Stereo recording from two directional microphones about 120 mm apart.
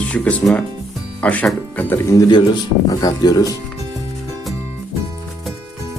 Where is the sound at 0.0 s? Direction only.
10° left (ahead or behind).